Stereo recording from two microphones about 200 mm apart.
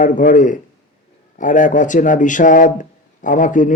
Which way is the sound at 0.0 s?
40° left (ahead or behind).